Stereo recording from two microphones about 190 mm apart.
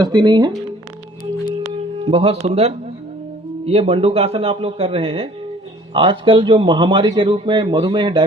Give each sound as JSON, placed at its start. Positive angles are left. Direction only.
{"t": 0.0, "sound": "a man's voice", "side_deg": -25}
{"t": 2.0, "sound": "a man's voice", "side_deg": -30}